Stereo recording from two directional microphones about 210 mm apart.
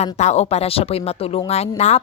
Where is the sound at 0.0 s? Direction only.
30° left (ahead or behind).